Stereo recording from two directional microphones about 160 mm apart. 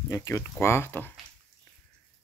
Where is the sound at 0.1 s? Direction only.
15° left (ahead or behind).